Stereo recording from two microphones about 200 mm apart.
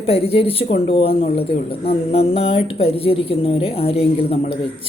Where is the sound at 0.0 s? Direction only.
30° left (ahead or behind).